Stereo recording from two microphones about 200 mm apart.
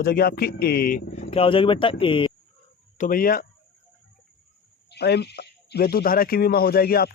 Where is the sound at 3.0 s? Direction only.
45° left (ahead or behind).